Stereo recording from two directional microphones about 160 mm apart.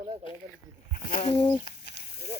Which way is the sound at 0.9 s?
60° left (ahead or behind).